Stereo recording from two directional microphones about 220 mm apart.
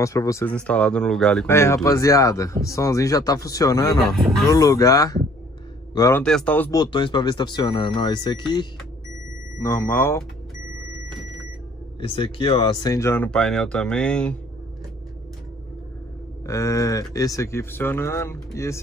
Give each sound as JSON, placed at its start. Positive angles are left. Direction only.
{"t": 0.0, "sound": "speech", "side_deg": 15}
{"t": 4.1, "sound": "speech", "side_deg": 0}
{"t": 4.5, "sound": "speech", "side_deg": 15}
{"t": 6.2, "sound": "speech", "side_deg": 5}
{"t": 6.8, "sound": "speech", "side_deg": 20}
{"t": 12.0, "sound": "speech", "side_deg": 25}
{"t": 16.4, "sound": "speech", "side_deg": 15}